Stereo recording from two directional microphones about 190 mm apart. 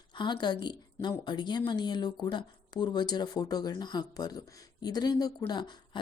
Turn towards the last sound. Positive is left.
turn(degrees=25)  # may be behind; listen again after turning